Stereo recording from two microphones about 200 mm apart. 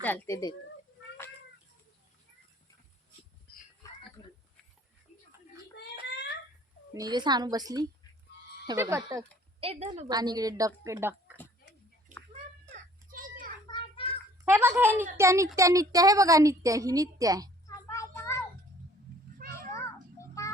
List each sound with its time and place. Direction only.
0.0 s speech: 10° left (ahead or behind)
3.5 s a sound: 55° left (ahead or behind)
4.2 s oink: 15° left (ahead or behind)
6.9 s a woman's voice: 20° right (ahead or behind)
9.6 s a woman's voice: 30° right (ahead or behind)
10.1 s a woman's voice: 20° right (ahead or behind)
12.7 s a sound: 45° right (ahead or behind)
13.7 s child singing: 25° left (ahead or behind)
14.4 s a woman's voice: 10° right (ahead or behind)
17.8 s a sound: 15° left (ahead or behind)
19.4 s cat: 45° right (ahead or behind)
20.4 s music: 15° left (ahead or behind)